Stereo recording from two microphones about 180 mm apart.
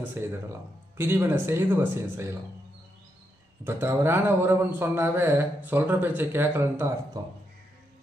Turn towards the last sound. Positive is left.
turn(degrees=-15)  # may be behind; listen again after turning